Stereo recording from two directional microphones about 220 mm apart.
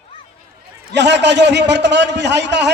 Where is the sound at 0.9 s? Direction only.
50° right (ahead or behind).